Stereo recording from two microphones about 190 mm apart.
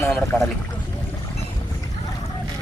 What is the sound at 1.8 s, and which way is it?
Boat, 20° left (ahead or behind).